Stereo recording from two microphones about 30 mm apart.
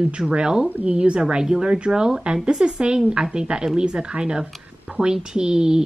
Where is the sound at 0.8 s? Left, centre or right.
Right.